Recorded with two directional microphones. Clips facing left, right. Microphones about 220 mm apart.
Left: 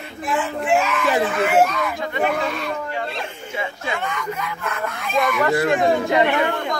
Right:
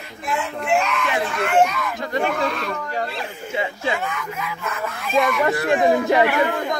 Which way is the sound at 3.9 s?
5° right (ahead or behind).